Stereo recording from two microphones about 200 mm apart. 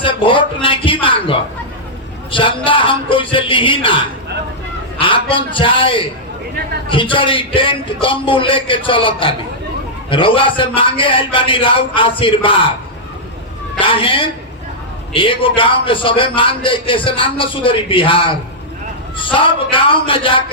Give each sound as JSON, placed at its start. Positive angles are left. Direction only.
{"t": 0.0, "sound": "a man's voice", "side_deg": 25}
{"t": 13.7, "sound": "a man's voice", "side_deg": 25}